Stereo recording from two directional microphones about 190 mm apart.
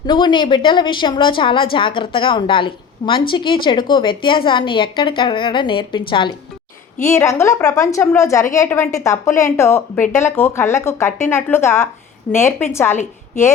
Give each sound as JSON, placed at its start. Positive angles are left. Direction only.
{"t": 0.0, "sound": "a woman's voice", "side_deg": 25}
{"t": 7.1, "sound": "speech", "side_deg": 15}